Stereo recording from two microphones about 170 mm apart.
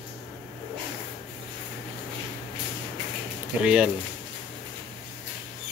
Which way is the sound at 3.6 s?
5° right (ahead or behind).